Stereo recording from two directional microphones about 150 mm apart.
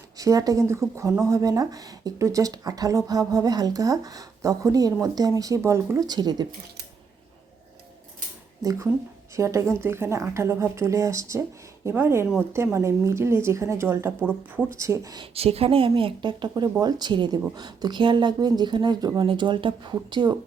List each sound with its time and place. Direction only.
0.2 s speech: 25° right (ahead or behind)
9.3 s a woman's voice: 20° right (ahead or behind)
15.4 s speech: 40° right (ahead or behind)